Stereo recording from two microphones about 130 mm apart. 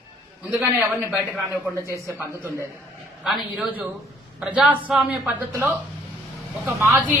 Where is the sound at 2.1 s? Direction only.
20° right (ahead or behind).